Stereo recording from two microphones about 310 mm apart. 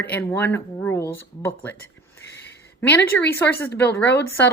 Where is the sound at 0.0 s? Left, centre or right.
Centre.